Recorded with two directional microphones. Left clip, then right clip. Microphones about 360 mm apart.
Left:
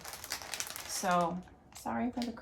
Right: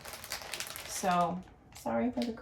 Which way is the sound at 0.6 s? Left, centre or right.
Centre.